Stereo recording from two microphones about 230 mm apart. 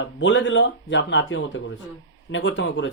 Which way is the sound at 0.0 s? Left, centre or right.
Left.